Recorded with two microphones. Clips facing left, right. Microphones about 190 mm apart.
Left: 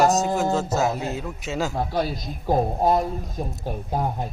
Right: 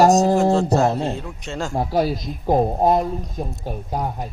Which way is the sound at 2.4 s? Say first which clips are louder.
Right 3 dB; 20° right (ahead or behind).